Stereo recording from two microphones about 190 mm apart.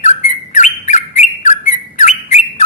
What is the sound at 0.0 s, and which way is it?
Bird, 40° left (ahead or behind).